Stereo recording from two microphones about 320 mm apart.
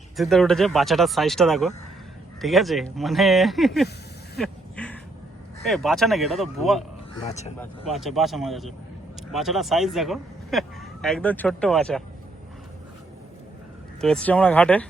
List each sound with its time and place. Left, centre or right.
0.2 s speech: centre
4.4 s a sound: centre
5.6 s speech: centre
7.2 s speech: centre
7.6 s speech: centre
14.0 s speech: centre